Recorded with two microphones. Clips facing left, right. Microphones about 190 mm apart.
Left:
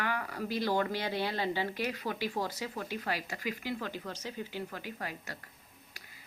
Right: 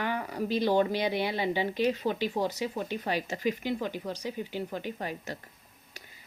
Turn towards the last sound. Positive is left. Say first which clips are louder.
# right 6 dB
turn(degrees=-25)  # may be behind; listen again after turning